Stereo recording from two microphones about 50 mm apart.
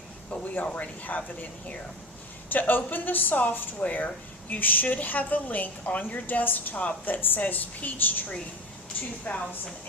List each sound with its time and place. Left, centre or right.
0.3 s speech: left